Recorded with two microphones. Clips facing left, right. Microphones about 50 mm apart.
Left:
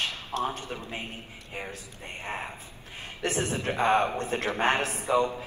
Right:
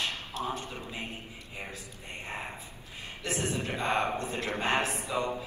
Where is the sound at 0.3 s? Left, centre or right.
Left.